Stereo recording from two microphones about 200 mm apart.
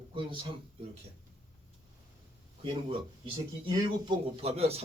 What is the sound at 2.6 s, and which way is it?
Speech, 25° right (ahead or behind).